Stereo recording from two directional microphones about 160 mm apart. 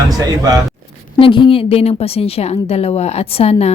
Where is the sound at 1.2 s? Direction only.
30° left (ahead or behind).